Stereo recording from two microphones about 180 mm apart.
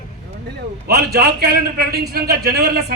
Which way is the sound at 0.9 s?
60° right (ahead or behind).